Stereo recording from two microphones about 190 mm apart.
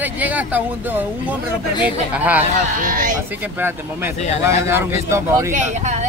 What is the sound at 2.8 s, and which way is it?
Speech, 45° right (ahead or behind).